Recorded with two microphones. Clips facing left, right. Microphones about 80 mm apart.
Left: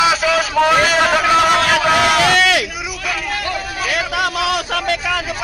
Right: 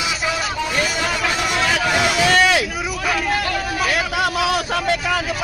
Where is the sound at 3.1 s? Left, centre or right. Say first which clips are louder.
Right 1 dB; centre.